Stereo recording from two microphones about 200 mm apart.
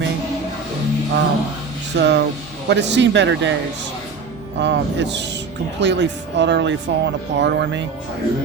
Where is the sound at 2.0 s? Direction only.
60° right (ahead or behind).